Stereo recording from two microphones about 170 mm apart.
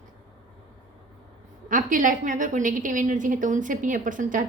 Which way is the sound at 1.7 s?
50° right (ahead or behind).